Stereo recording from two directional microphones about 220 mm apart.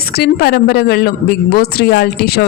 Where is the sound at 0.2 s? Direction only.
45° left (ahead or behind).